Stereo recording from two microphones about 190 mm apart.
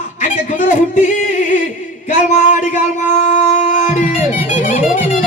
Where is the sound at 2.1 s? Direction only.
40° left (ahead or behind).